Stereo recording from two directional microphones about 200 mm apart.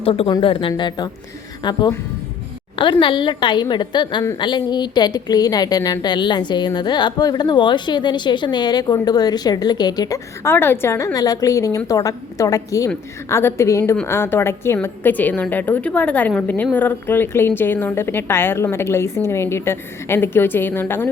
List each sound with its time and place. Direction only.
0.0 s a woman's voice: 25° left (ahead or behind); by 21.1 s 10° left (ahead or behind)